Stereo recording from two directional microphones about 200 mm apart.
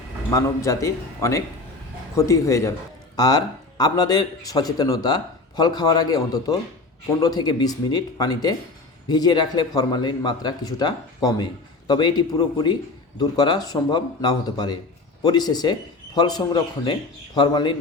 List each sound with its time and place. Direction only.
0.3 s a man's voice: 15° left (ahead or behind)